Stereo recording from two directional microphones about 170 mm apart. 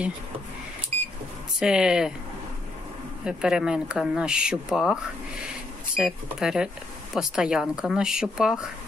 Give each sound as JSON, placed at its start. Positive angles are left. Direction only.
{"t": 0.9, "sound": "a sound", "side_deg": -35}
{"t": 1.6, "sound": "speech", "side_deg": -5}
{"t": 3.3, "sound": "speech", "side_deg": -5}
{"t": 5.9, "sound": "speech", "side_deg": -5}